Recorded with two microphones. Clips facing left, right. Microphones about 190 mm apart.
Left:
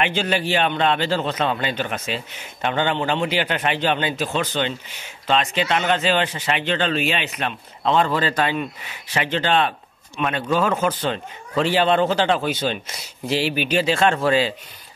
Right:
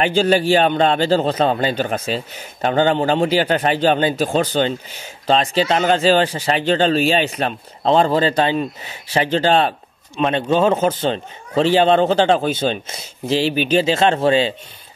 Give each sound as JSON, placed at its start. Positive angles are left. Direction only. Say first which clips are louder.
{"t": 0.0, "sound": "speech", "louder": "right 6 dB", "side_deg": -35}